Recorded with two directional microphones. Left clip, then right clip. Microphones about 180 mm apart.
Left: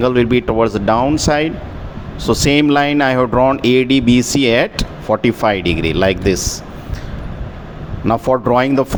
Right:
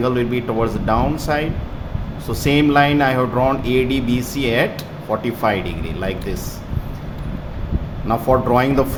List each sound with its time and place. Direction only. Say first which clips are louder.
0.0 s speech: left 6 dB; 45° left (ahead or behind)
8.0 s speech: left 3 dB; 45° left (ahead or behind)